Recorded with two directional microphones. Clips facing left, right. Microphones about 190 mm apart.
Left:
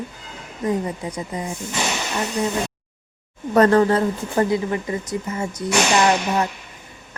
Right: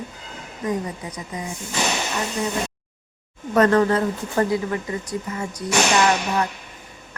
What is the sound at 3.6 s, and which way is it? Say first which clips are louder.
Speech: left 2 dB; 30° left (ahead or behind).